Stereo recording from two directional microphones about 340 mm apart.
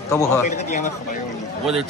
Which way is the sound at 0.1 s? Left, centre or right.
Centre.